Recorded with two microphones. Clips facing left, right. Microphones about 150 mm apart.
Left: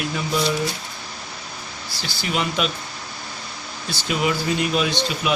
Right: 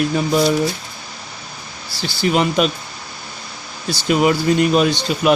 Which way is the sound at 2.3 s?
40° right (ahead or behind).